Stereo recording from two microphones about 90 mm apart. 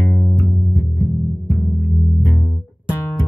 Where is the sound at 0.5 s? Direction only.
25° left (ahead or behind).